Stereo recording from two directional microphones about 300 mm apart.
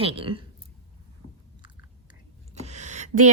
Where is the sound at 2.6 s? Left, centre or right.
Right.